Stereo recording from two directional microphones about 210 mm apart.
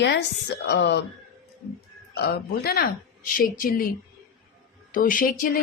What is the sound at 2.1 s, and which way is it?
Speech, 50° left (ahead or behind).